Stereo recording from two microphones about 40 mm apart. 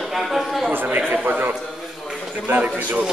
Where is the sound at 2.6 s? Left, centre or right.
Right.